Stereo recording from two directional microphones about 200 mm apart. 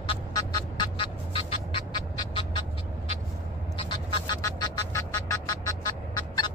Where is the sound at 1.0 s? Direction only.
25° left (ahead or behind).